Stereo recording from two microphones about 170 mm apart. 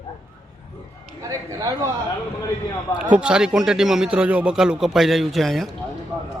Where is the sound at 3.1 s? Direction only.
5° right (ahead or behind).